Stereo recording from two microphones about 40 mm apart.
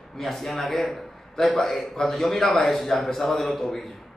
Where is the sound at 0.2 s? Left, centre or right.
Centre.